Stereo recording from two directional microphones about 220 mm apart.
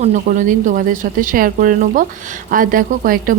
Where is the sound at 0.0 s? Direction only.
35° right (ahead or behind).